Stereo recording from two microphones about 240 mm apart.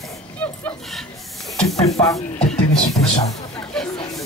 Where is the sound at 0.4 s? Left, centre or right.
Centre.